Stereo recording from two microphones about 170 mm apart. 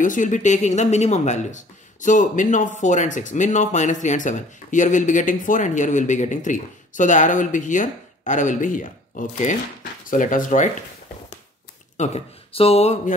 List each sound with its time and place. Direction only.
0.0 s speech: 50° left (ahead or behind)
12.0 s speech: 35° left (ahead or behind)